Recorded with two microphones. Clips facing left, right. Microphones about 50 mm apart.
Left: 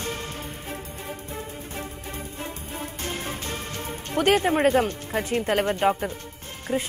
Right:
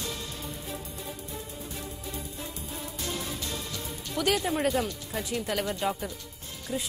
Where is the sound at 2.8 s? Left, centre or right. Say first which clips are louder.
Left 3 dB; left.